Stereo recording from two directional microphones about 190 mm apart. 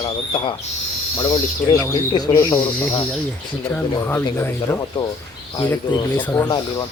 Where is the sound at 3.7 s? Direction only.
10° left (ahead or behind).